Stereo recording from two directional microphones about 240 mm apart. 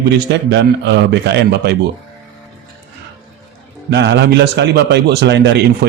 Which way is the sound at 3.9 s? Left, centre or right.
Right.